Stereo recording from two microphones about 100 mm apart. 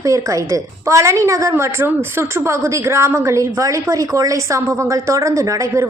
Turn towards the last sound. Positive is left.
turn(degrees=-30)  # may be behind; listen again after turning